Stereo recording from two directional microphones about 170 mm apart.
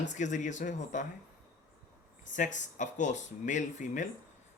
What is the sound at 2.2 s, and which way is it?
Speech, 50° left (ahead or behind).